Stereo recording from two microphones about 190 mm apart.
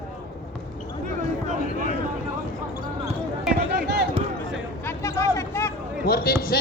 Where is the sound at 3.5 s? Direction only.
60° right (ahead or behind).